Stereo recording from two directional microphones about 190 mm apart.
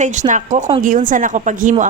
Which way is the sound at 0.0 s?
40° right (ahead or behind).